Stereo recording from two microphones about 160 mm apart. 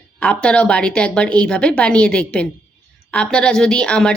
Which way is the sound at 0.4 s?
5° left (ahead or behind).